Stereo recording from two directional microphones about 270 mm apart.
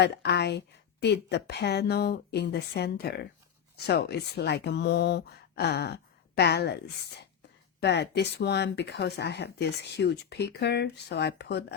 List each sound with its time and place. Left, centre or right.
0.0 s speech: left